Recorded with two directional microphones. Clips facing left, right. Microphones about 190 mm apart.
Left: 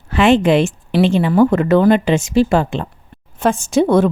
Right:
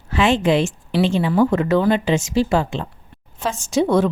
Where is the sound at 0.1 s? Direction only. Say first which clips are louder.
Left 5 dB; 60° left (ahead or behind).